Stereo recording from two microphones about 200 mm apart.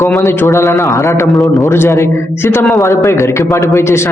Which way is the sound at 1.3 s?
Centre (ahead or behind).